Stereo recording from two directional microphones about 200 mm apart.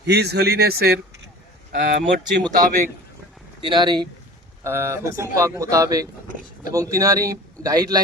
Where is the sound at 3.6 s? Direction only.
25° right (ahead or behind).